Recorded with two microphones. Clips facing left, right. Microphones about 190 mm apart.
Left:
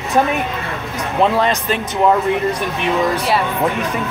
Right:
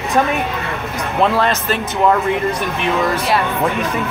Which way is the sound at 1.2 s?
15° left (ahead or behind).